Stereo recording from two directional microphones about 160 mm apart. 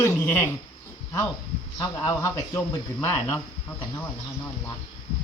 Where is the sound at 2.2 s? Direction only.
15° left (ahead or behind).